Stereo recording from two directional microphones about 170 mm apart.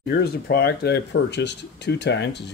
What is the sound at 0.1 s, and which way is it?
Speech, 65° left (ahead or behind).